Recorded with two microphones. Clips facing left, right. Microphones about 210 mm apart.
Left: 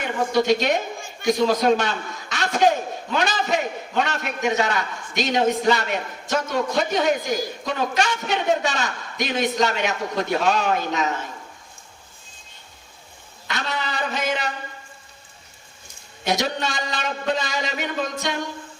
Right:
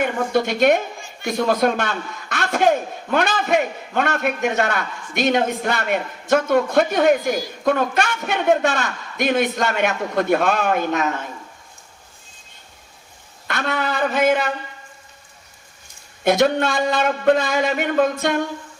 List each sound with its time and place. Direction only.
0.3 s a man's voice: 55° right (ahead or behind)
13.5 s a man's voice: 55° right (ahead or behind)
16.2 s a man's voice: 55° right (ahead or behind)